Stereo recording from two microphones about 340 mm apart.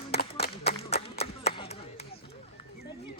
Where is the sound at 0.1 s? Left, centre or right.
Left.